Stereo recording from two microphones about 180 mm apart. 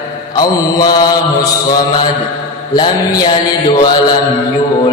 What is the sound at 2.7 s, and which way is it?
Mantra, 25° left (ahead or behind).